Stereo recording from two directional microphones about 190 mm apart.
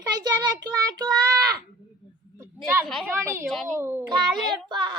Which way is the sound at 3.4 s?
Centre (ahead or behind).